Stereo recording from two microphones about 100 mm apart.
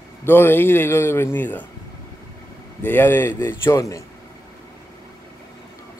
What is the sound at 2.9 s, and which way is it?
Speech, 20° left (ahead or behind).